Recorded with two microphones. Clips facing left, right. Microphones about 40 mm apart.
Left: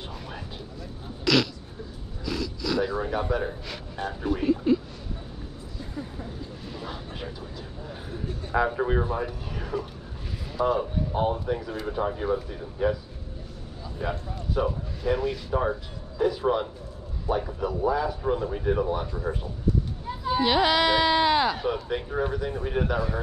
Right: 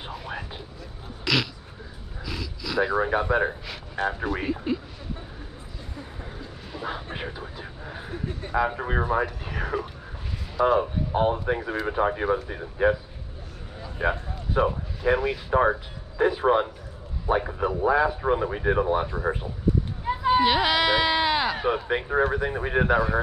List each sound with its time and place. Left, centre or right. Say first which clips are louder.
0.1 s vehicle: right 4 dB; centre
1.2 s a sound: left 2 dB; centre
2.8 s speech: right 7 dB; right
4.3 s speech: left 4 dB; centre
6.9 s a sound: right 4 dB; right
8.7 s speech: right 1 dB; centre
10.8 s speech: right 3 dB; right
20.1 s a sound: right 6 dB; right
20.4 s speech: even; centre
21.5 s speech: right 3 dB; right